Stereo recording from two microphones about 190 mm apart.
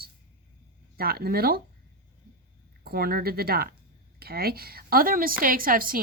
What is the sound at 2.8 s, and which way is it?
A woman's voice, 55° right (ahead or behind).